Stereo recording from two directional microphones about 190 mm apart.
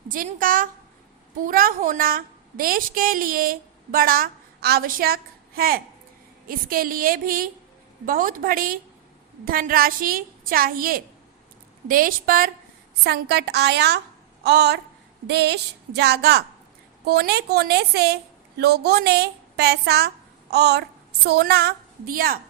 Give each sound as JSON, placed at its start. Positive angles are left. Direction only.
{"t": 0.1, "sound": "a woman's voice", "side_deg": -45}